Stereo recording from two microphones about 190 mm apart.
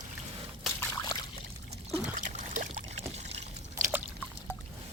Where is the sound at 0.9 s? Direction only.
20° left (ahead or behind).